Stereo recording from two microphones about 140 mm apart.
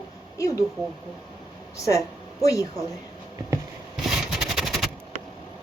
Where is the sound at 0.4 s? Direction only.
20° left (ahead or behind).